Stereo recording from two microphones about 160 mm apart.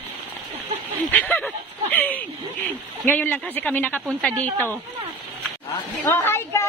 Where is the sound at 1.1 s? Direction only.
10° left (ahead or behind).